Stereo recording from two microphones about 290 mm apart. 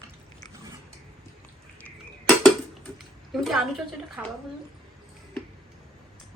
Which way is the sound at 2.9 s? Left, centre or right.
Centre.